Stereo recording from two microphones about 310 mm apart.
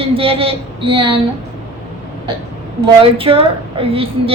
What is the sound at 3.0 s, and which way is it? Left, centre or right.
A woman's voice, centre.